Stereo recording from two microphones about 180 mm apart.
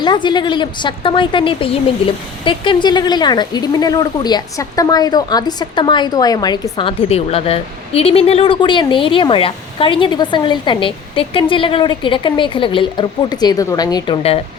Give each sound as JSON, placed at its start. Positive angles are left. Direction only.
{"t": 0.0, "sound": "a woman's voice", "side_deg": 25}